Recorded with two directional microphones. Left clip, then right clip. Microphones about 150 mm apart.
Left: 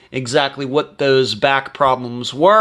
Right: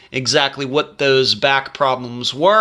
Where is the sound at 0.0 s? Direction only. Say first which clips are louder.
Right 1 dB; 20° left (ahead or behind).